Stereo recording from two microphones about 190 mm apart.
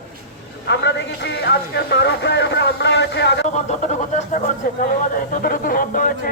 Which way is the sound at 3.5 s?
40° left (ahead or behind).